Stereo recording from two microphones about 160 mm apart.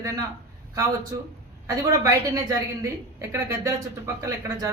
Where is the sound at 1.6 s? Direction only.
20° right (ahead or behind).